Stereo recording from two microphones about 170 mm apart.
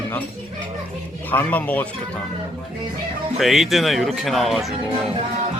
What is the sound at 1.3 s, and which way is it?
Speech, 10° left (ahead or behind).